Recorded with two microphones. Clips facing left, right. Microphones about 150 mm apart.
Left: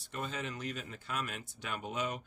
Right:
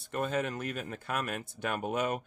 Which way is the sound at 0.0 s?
55° right (ahead or behind).